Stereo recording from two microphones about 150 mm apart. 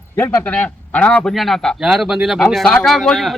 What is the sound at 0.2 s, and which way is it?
A man's voice, 15° left (ahead or behind).